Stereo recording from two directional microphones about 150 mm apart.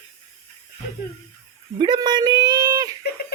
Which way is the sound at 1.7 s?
30° right (ahead or behind).